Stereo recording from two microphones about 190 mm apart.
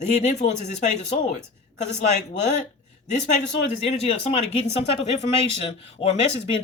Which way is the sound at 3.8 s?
30° left (ahead or behind).